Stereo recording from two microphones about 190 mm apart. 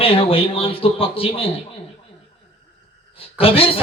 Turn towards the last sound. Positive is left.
turn(degrees=30)  # may be behind; listen again after turning